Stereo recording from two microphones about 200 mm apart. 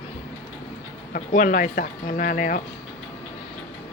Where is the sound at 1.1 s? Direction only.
40° left (ahead or behind).